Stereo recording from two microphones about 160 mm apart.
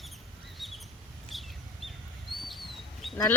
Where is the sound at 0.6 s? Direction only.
Centre (ahead or behind).